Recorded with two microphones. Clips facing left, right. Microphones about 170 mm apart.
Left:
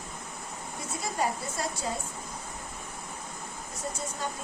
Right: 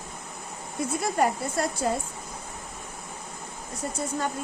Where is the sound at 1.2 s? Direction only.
60° right (ahead or behind).